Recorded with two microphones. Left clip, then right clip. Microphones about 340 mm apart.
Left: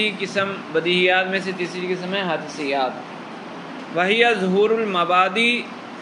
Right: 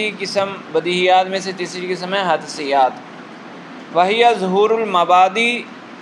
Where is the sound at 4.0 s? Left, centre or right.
Centre.